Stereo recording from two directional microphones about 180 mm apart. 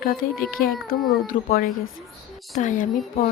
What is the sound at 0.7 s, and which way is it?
Speech, centre (ahead or behind).